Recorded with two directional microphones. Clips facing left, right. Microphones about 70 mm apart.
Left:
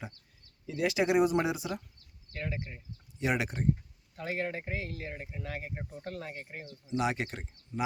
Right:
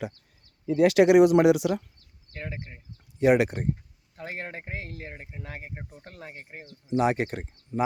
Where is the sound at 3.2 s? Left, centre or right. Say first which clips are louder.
Right 11 dB; right.